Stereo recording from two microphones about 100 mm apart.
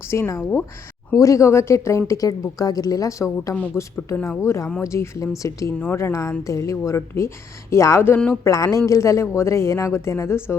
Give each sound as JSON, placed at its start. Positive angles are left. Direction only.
{"t": 0.1, "sound": "speech", "side_deg": 30}